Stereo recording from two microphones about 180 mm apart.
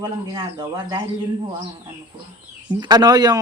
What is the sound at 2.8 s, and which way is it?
Speech, 20° right (ahead or behind).